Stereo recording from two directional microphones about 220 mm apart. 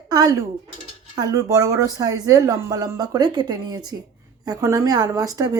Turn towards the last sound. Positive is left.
turn(degrees=-15)  # may be behind; listen again after turning